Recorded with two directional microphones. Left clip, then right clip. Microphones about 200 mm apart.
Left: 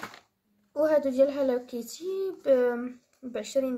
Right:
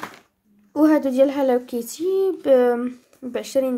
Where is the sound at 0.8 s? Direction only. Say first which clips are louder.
Right 6 dB; 40° right (ahead or behind).